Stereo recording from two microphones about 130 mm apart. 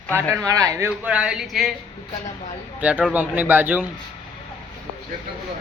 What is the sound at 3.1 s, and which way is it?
Speech, 15° right (ahead or behind).